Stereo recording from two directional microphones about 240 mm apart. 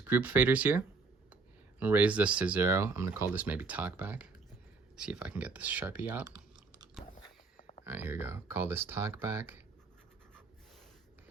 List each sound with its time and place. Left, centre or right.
0.0 s speech: centre
7.5 s a sound: left
7.9 s speech: centre